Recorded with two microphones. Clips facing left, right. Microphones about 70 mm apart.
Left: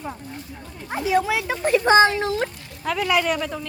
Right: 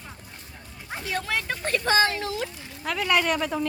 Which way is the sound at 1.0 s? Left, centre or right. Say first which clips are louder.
Left 8 dB; centre.